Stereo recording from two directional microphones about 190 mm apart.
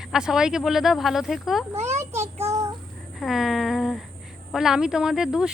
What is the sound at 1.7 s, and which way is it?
Child singing, 35° right (ahead or behind).